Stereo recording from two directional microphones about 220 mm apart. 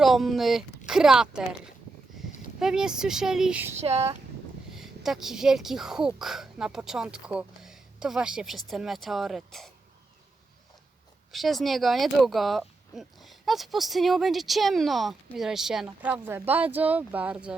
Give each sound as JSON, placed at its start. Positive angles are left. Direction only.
{"t": 0.0, "sound": "speech", "side_deg": 0}
{"t": 2.6, "sound": "speech", "side_deg": 0}
{"t": 3.8, "sound": "speech", "side_deg": -30}
{"t": 4.7, "sound": "speech", "side_deg": 0}
{"t": 11.3, "sound": "speech", "side_deg": 0}